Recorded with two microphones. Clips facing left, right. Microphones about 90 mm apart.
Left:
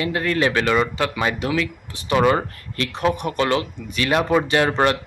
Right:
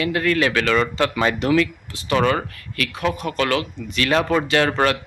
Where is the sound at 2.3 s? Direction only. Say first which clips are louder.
Left 2 dB; 25° left (ahead or behind).